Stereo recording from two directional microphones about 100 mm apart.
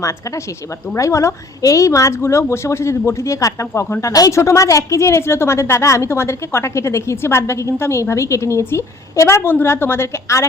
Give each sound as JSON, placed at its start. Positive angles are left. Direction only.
{"t": 0.9, "sound": "a woman's voice", "side_deg": 30}